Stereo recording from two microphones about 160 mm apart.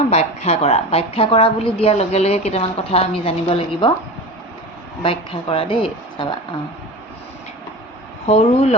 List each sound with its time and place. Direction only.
0.1 s a woman's voice: 40° left (ahead or behind)
5.0 s a woman's voice: 35° left (ahead or behind)
8.3 s a woman's voice: 40° left (ahead or behind)